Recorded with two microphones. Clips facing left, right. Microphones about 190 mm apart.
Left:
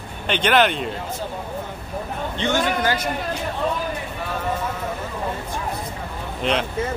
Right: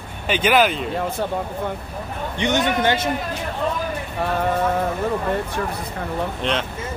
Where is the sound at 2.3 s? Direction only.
20° right (ahead or behind).